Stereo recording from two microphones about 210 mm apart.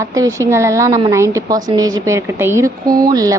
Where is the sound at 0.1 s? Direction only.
15° right (ahead or behind).